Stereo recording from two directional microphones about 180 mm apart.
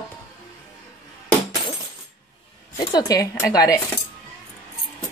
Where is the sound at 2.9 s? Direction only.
20° left (ahead or behind).